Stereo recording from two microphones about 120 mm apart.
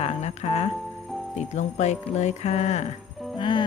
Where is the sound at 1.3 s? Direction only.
75° left (ahead or behind).